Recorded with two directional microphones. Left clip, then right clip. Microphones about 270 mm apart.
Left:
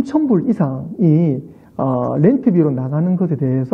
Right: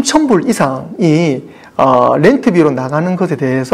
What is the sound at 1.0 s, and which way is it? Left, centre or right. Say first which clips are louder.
Speech: right 4 dB; centre.